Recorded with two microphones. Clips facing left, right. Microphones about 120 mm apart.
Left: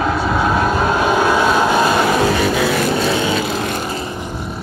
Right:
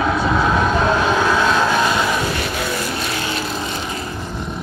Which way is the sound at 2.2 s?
80° left.